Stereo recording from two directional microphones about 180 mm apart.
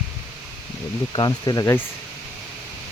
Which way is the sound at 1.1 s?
20° left (ahead or behind).